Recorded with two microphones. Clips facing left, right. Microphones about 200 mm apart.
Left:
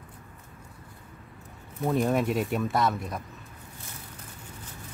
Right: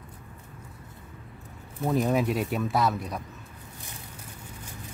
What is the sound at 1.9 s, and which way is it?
Speech, centre (ahead or behind).